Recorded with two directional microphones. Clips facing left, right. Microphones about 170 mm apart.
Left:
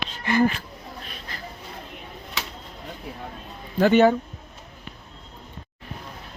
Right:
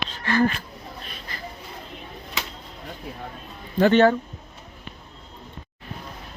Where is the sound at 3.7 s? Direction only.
10° left (ahead or behind).